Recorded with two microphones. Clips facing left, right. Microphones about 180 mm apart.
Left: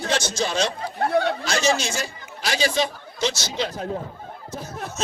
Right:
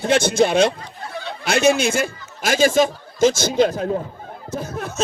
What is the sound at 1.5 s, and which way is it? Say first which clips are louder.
A man's voice: right 6 dB; 55° right (ahead or behind).